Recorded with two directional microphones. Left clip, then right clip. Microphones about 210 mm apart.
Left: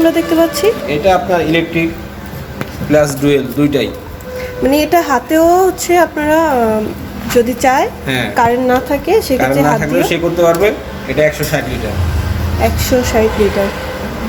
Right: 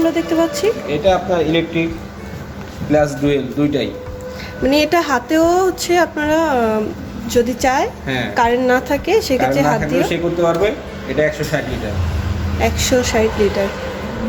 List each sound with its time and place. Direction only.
0.0 s speech: 10° left (ahead or behind)
0.9 s speech: 15° right (ahead or behind)
2.9 s a woman's voice: 5° left (ahead or behind)
5.1 s a woman's voice: 5° left (ahead or behind)